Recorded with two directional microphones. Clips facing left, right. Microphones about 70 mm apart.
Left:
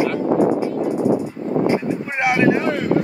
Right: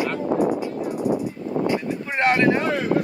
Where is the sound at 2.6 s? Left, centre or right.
Centre.